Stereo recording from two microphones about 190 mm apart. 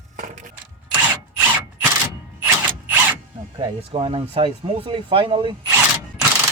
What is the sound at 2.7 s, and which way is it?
Mechanisms, 10° right (ahead or behind).